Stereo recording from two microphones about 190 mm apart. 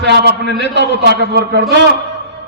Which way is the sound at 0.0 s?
60° right (ahead or behind).